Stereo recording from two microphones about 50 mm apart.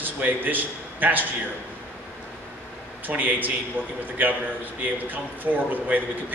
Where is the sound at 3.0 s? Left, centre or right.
Right.